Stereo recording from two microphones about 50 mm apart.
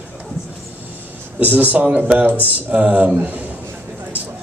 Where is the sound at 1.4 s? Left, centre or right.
Right.